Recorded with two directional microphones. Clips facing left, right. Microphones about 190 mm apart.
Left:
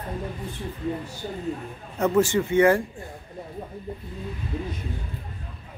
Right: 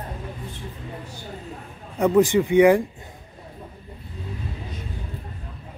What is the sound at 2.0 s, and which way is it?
Speech, 15° right (ahead or behind).